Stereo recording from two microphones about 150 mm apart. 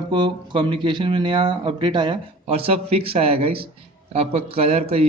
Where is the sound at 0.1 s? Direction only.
30° right (ahead or behind).